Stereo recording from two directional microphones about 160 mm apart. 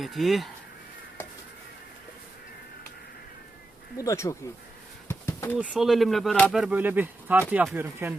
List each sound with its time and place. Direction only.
0.0 s speech: centre (ahead or behind)
3.9 s speech: 20° left (ahead or behind)
5.0 s a sound: 15° left (ahead or behind)
5.5 s speech: centre (ahead or behind)
6.5 s speech: 5° right (ahead or behind)